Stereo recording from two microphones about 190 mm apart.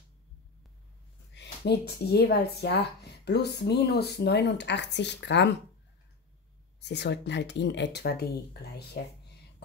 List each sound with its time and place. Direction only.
1.3 s a woman's voice: 65° left (ahead or behind)
6.8 s speech: 65° left (ahead or behind)